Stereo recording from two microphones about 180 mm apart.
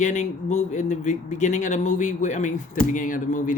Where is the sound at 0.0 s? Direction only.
40° left (ahead or behind).